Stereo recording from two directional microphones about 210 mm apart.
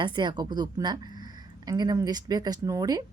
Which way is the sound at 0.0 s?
20° right (ahead or behind).